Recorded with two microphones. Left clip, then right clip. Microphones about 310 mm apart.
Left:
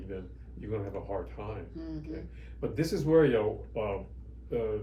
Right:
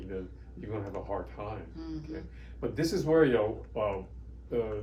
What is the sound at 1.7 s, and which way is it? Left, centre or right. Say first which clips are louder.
Speech: even; centre.